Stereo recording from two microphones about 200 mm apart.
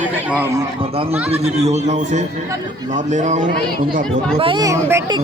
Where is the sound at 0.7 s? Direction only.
25° right (ahead or behind).